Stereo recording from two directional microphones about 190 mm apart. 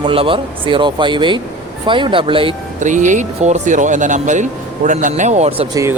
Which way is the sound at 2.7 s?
40° right (ahead or behind).